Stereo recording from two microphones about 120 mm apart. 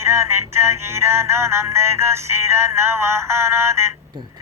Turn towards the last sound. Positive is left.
turn(degrees=-20)  # may be behind; listen again after turning